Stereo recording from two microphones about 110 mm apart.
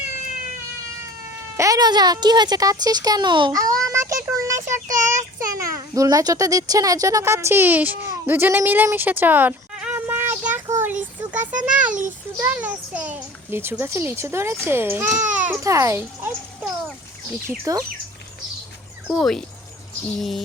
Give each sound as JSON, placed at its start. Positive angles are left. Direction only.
{"t": 1.5, "sound": "child singing", "side_deg": -30}
{"t": 3.5, "sound": "child singing", "side_deg": -30}
{"t": 8.0, "sound": "speech", "side_deg": -20}
{"t": 10.7, "sound": "a sound", "side_deg": -20}
{"t": 12.5, "sound": "a child's voice", "side_deg": -15}
{"t": 15.6, "sound": "a child's voice", "side_deg": -25}
{"t": 17.7, "sound": "child singing", "side_deg": -35}
{"t": 19.0, "sound": "speech", "side_deg": 0}